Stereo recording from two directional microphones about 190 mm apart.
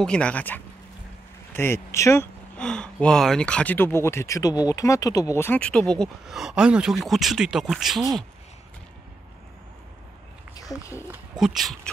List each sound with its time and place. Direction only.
0.0 s speech: 5° left (ahead or behind)
10.8 s speech: 15° left (ahead or behind)
11.1 s speech: 5° right (ahead or behind)